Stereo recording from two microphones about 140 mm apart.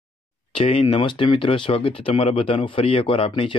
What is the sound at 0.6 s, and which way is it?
Speech, 40° left (ahead or behind).